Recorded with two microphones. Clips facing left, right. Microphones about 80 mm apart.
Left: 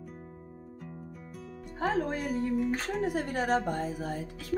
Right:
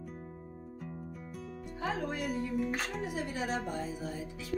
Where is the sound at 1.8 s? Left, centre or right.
Left.